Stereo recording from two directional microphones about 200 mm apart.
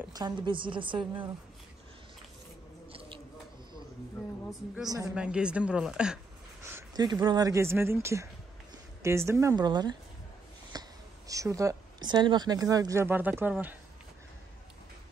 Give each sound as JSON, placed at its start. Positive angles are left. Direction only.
{"t": 0.0, "sound": "a woman's voice", "side_deg": -20}
{"t": 2.9, "sound": "a sound", "side_deg": -30}
{"t": 4.8, "sound": "a woman's voice", "side_deg": -15}
{"t": 5.1, "sound": "a woman's voice", "side_deg": -5}
{"t": 6.6, "sound": "a woman's voice", "side_deg": -15}